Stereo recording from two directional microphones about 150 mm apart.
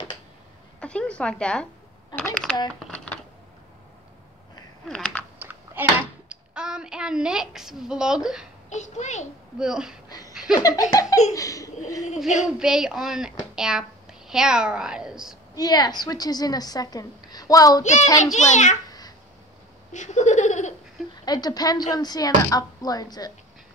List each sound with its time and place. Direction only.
0.7 s a woman's voice: 5° left (ahead or behind)
4.8 s typing: 5° left (ahead or behind)
5.4 s speech: 10° right (ahead or behind)
8.6 s a child's voice: 50° left (ahead or behind)
9.6 s speech: 5° right (ahead or behind)
10.0 s a sound: 25° left (ahead or behind)
10.3 s laughter: 5° right (ahead or behind)
10.6 s a woman's voice: 25° left (ahead or behind)
12.5 s a woman's voice: 5° right (ahead or behind)
15.5 s a woman's voice: 25° left (ahead or behind)
18.1 s a child's voice: 50° left (ahead or behind)
18.9 s cat: 25° left (ahead or behind)
19.9 s laughter: 55° left (ahead or behind)
21.3 s a woman's voice: 25° left (ahead or behind)